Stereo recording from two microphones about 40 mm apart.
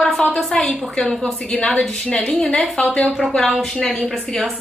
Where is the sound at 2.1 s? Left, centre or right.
Left.